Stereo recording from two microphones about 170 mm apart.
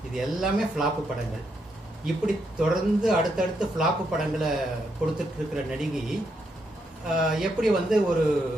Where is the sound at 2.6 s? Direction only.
5° right (ahead or behind).